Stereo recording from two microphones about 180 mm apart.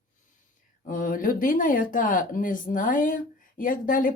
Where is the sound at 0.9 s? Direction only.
50° left (ahead or behind).